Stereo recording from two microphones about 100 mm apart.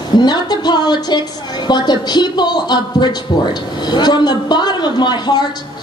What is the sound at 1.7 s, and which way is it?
A man's voice, 45° left (ahead or behind).